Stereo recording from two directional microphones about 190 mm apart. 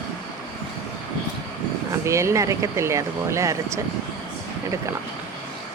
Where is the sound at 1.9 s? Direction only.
15° right (ahead or behind).